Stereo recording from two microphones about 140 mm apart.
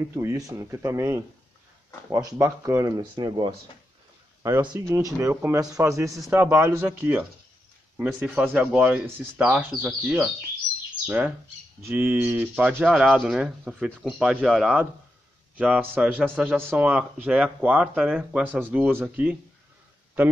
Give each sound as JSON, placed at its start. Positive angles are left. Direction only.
{"t": 0.0, "sound": "a man's voice", "side_deg": -15}
{"t": 3.0, "sound": "a man's voice", "side_deg": -30}